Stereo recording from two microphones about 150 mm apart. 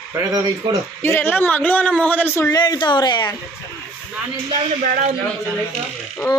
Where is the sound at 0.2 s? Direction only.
25° right (ahead or behind).